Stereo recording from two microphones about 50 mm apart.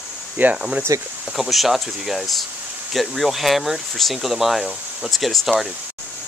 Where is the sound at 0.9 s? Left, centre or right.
Right.